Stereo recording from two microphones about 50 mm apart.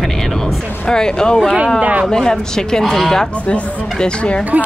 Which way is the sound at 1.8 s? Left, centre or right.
Right.